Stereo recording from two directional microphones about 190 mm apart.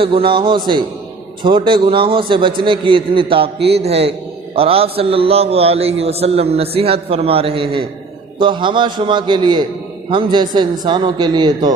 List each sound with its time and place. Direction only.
0.0 s a man's voice: 30° right (ahead or behind)